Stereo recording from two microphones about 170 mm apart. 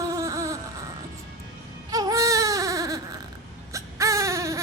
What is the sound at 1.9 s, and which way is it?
Baby cry, 20° right (ahead or behind).